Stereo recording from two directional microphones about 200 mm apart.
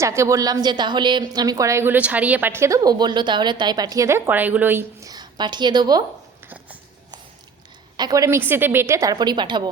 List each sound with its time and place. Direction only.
0.0 s a woman's voice: 15° right (ahead or behind)
6.4 s a sound: 10° right (ahead or behind)
7.9 s a woman's voice: 20° right (ahead or behind)